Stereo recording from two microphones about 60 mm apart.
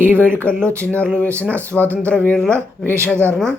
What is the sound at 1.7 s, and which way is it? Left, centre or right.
Speech, left.